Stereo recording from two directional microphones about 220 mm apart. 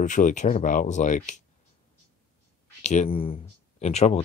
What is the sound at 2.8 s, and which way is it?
Speech, 30° left (ahead or behind).